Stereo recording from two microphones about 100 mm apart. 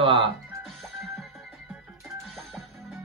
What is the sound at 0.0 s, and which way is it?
Music, 60° right (ahead or behind).